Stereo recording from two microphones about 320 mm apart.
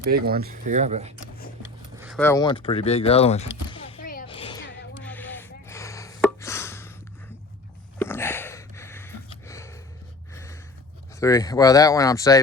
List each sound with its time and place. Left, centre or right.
0.1 s speech: right
2.0 s speech: centre
3.7 s a sound: centre
5.0 s gasp: centre
7.9 s a sound: centre
10.3 s gasp: centre
11.2 s speech: centre